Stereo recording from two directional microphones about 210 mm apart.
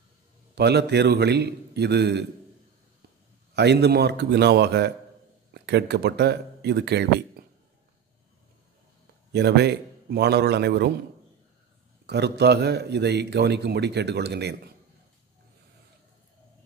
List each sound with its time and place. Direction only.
0.6 s a man's voice: 50° right (ahead or behind)
3.5 s a man's voice: 50° right (ahead or behind)
9.3 s a man's voice: 55° right (ahead or behind)
12.1 s a man's voice: 50° right (ahead or behind)